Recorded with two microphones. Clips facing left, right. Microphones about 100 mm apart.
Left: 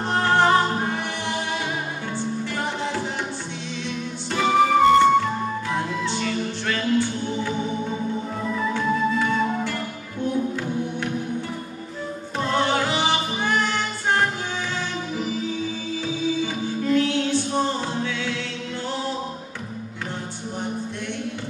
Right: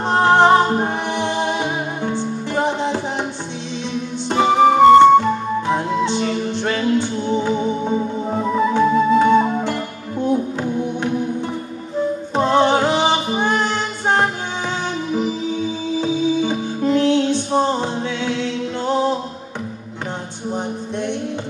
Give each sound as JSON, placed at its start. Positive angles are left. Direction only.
{"t": 0.1, "sound": "music", "side_deg": -20}
{"t": 4.3, "sound": "music", "side_deg": -30}
{"t": 12.5, "sound": "music", "side_deg": -25}
{"t": 16.0, "sound": "music", "side_deg": -25}